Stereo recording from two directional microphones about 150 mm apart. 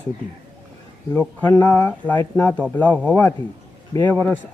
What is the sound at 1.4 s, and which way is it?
Speech, 15° left (ahead or behind).